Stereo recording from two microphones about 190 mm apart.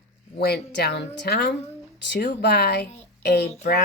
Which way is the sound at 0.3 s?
55° left (ahead or behind).